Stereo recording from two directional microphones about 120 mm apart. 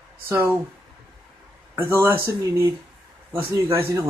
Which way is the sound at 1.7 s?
20° right (ahead or behind).